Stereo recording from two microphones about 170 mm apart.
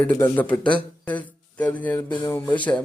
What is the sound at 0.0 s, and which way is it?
A man's voice, 10° left (ahead or behind).